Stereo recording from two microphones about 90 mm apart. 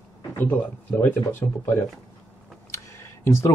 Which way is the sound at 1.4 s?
45° left (ahead or behind).